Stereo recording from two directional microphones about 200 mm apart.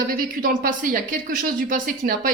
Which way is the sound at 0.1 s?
45° right (ahead or behind).